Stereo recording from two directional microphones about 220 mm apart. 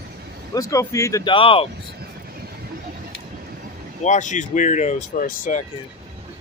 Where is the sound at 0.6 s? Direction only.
15° left (ahead or behind).